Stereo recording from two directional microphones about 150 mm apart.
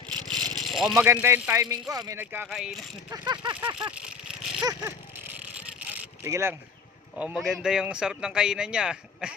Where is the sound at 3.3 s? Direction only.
30° right (ahead or behind).